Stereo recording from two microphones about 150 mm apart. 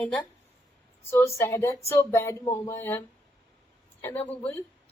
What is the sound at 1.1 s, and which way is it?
A man's voice, 15° left (ahead or behind).